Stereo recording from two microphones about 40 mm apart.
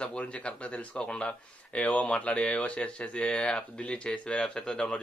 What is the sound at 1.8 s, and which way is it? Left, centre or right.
Speech, left.